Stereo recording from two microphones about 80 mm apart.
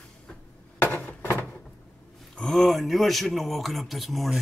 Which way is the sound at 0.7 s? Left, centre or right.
Left.